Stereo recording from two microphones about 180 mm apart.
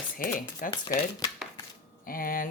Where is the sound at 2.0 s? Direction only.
50° left (ahead or behind).